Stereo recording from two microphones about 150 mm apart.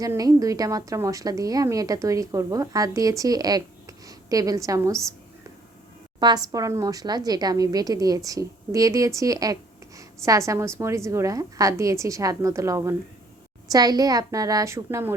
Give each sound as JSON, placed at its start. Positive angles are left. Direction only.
{"t": 0.0, "sound": "a woman's voice", "side_deg": -25}
{"t": 6.1, "sound": "a woman's voice", "side_deg": -30}